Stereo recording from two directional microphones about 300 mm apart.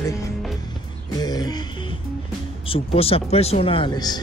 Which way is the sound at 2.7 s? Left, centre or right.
Centre.